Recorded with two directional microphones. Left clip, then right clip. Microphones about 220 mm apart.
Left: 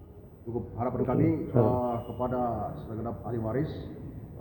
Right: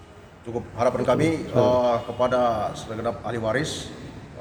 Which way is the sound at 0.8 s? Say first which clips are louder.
Right 8 dB; 45° right (ahead or behind).